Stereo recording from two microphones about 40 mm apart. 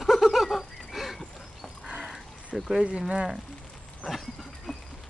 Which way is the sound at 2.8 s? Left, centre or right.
Right.